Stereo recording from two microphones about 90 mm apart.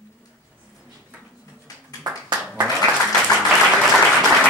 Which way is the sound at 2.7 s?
5° left (ahead or behind).